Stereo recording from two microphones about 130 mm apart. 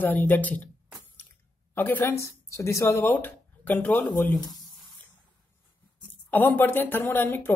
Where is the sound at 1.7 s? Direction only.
15° left (ahead or behind).